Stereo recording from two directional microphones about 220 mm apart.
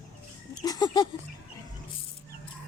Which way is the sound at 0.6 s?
15° left (ahead or behind).